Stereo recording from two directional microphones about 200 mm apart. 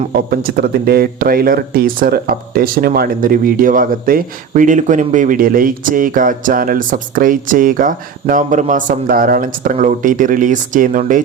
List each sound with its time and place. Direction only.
0.3 s speech: 50° right (ahead or behind)